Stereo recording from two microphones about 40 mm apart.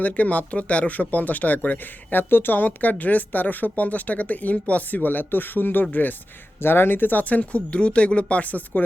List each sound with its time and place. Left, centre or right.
0.0 s speech: left
6.6 s speech: left